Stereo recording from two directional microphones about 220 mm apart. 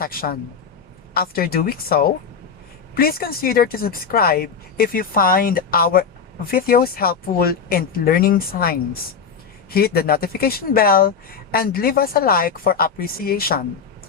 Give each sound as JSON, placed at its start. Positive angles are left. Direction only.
{"t": 0.0, "sound": "speech", "side_deg": 40}